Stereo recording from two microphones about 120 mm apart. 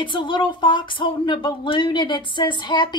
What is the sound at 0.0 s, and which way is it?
Speech, 40° left (ahead or behind).